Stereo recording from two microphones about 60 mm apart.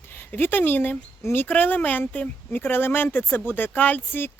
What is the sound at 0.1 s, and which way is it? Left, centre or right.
Speech, left.